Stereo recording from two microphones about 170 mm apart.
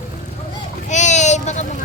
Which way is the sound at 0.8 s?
45° left (ahead or behind).